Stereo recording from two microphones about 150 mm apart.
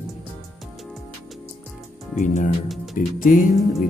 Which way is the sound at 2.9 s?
65° left (ahead or behind).